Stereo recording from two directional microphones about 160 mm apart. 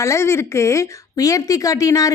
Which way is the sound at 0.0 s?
15° left (ahead or behind).